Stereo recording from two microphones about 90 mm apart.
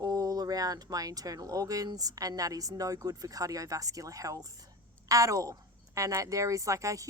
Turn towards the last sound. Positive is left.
turn(degrees=-35)  # may be behind; listen again after turning